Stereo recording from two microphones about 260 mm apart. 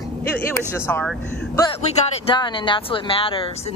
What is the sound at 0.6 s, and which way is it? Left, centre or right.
Speech, centre.